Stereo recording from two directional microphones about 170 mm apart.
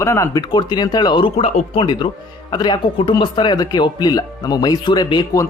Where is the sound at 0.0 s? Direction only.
15° left (ahead or behind).